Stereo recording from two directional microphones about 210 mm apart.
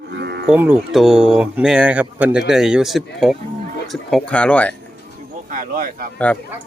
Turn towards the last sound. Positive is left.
turn(degrees=-40)  # may be behind; listen again after turning